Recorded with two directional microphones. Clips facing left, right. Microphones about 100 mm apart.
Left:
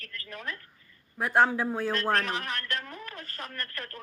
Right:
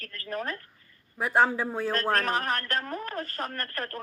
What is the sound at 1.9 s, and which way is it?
A man's voice, 40° right (ahead or behind).